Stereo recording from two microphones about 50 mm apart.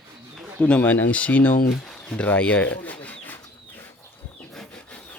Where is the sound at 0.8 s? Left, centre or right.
Left.